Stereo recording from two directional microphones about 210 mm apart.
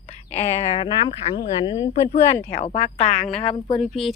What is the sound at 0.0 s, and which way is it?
Speech, 30° left (ahead or behind).